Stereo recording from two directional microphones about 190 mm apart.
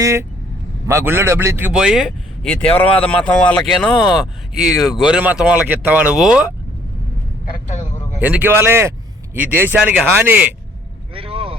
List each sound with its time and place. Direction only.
0.0 s speech: 15° right (ahead or behind)
8.2 s speech: 10° right (ahead or behind)
11.1 s vehicle: 30° right (ahead or behind)